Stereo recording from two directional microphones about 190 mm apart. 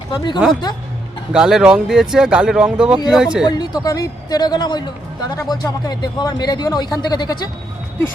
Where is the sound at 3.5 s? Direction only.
20° left (ahead or behind).